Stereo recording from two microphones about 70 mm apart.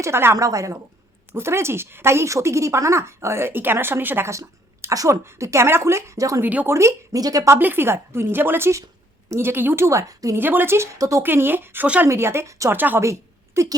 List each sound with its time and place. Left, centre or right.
0.0 s speech: right
0.3 s a woman's voice: right
1.3 s speech: right
4.3 s a woman's voice: right
6.4 s a woman's voice: right
6.7 s a woman's voice: right
7.2 s a woman's voice: right
7.6 s speech: right
10.3 s speech: right
10.9 s a woman's voice: right
11.2 s speech: right
12.7 s a woman's voice: right
13.0 s a sound: right